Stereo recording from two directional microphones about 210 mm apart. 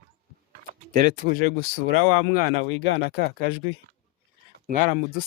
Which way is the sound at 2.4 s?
75° left (ahead or behind).